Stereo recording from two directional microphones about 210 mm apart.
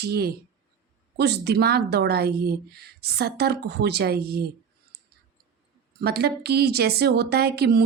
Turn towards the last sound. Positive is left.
turn(degrees=-50)  # may be behind; listen again after turning